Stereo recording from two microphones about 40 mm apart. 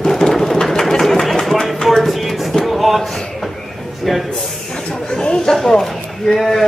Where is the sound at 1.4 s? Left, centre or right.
Centre.